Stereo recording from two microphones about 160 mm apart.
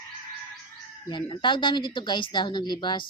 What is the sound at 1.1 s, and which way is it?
Speech, 30° left (ahead or behind).